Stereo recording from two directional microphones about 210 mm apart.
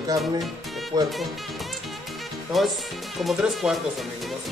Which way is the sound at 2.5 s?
Centre (ahead or behind).